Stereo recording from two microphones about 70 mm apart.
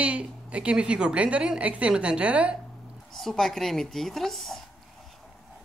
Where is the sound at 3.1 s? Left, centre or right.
Centre.